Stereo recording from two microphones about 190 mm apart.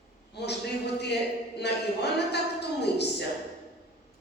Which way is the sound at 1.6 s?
60° left (ahead or behind).